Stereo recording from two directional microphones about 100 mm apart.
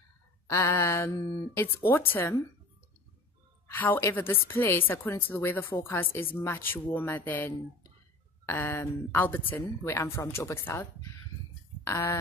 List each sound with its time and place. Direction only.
0.5 s a woman's voice: 30° left (ahead or behind)
3.6 s a woman's voice: 20° left (ahead or behind)